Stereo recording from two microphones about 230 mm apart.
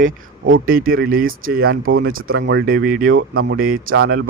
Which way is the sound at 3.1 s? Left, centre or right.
Right.